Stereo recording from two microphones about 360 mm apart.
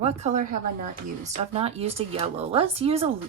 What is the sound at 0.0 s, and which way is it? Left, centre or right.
A woman's voice, centre.